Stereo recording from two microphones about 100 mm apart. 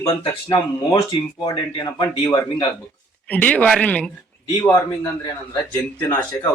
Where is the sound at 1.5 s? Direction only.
45° left (ahead or behind).